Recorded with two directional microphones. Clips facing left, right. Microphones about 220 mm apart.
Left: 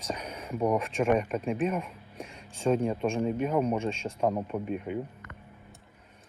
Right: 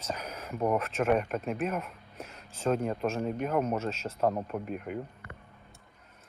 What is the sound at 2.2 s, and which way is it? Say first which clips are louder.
Speech: left 2 dB; 30° left (ahead or behind).